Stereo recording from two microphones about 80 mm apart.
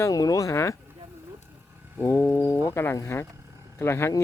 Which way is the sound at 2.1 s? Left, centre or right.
Left.